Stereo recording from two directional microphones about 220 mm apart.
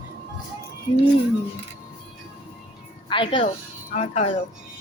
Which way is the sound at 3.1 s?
25° left (ahead or behind).